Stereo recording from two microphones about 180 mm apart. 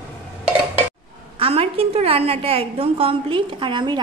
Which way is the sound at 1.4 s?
35° right (ahead or behind).